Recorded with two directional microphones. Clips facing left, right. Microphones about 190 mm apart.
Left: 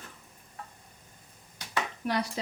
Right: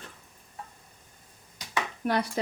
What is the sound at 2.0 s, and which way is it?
Speech, 50° right (ahead or behind).